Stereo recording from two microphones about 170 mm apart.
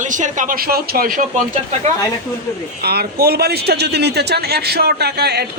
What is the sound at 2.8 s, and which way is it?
A man's voice, 65° right (ahead or behind).